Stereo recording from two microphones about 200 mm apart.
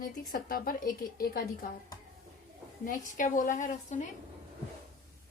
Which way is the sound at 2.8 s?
40° left (ahead or behind).